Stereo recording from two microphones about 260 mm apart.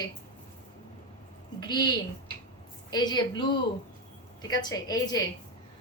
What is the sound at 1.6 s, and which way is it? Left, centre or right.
A woman's voice, centre.